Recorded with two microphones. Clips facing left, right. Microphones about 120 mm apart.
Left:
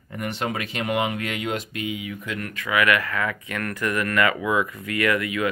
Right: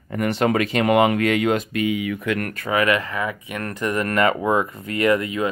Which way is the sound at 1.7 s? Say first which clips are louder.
Right 8 dB; 60° right (ahead or behind).